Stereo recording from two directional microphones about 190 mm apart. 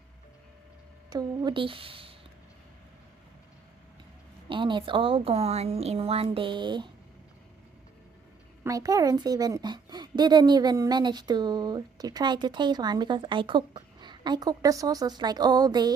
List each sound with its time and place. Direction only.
1.1 s a woman's voice: 25° right (ahead or behind)
4.4 s a woman's voice: 25° right (ahead or behind)
8.6 s a woman's voice: 20° right (ahead or behind)